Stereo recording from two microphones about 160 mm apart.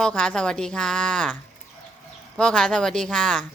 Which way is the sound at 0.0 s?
5° left (ahead or behind).